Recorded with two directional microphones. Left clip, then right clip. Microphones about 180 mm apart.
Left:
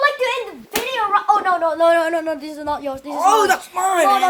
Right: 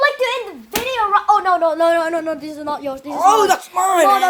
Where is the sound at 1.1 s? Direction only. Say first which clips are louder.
Right 2 dB; 20° right (ahead or behind).